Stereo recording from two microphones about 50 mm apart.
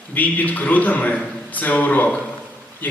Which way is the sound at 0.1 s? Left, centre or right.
Left.